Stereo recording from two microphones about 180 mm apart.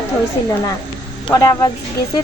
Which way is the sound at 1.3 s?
20° left (ahead or behind).